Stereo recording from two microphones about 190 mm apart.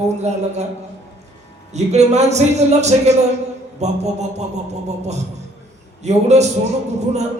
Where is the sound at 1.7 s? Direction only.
35° right (ahead or behind).